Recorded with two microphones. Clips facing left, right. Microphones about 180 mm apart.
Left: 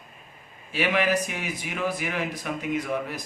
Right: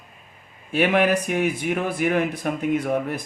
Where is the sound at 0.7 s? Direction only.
55° right (ahead or behind).